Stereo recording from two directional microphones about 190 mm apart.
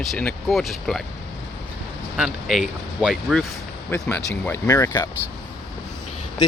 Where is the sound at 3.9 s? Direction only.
10° left (ahead or behind).